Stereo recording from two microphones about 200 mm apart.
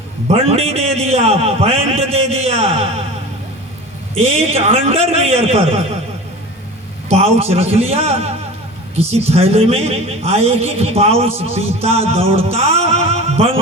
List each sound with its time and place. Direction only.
0.3 s a man's voice: 30° right (ahead or behind)
4.1 s a man's voice: 30° right (ahead or behind)
7.1 s a man's voice: 30° right (ahead or behind)